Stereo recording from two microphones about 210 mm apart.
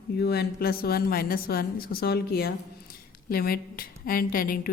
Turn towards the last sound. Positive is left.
turn(degrees=45)  # may be behind; listen again after turning